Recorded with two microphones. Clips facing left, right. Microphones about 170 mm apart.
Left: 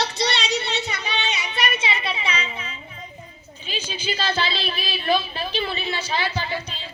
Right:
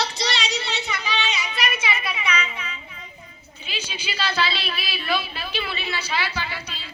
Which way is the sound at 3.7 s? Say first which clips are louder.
Left 4 dB; 40° left (ahead or behind).